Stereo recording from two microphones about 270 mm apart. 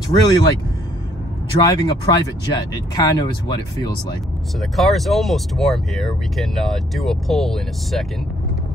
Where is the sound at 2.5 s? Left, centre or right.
Centre.